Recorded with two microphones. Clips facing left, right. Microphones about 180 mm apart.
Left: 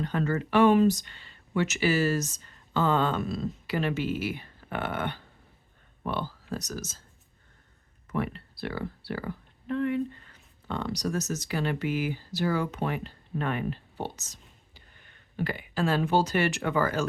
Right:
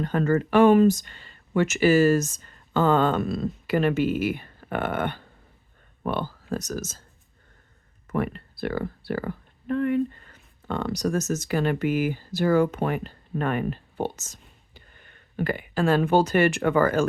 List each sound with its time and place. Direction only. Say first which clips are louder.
0.0 s speech: right 6 dB; 50° right (ahead or behind)
8.0 s speech: right 4 dB; 50° right (ahead or behind)